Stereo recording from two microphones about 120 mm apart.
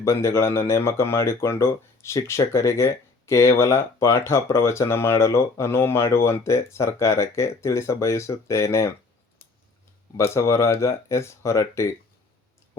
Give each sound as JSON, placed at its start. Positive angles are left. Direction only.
{"t": 0.0, "sound": "speech", "side_deg": 20}
{"t": 10.2, "sound": "speech", "side_deg": 25}